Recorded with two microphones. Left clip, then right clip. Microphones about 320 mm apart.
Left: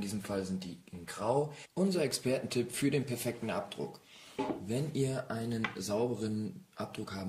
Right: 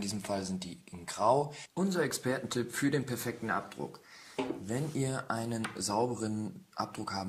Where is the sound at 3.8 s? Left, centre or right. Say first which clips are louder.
Left 1 dB; centre.